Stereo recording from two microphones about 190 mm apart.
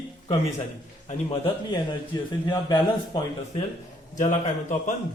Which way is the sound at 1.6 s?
20° left (ahead or behind).